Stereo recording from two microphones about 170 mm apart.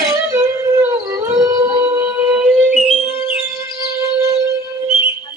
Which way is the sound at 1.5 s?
15° right (ahead or behind).